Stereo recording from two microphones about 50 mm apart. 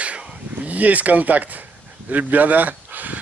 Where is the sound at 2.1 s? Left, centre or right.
Right.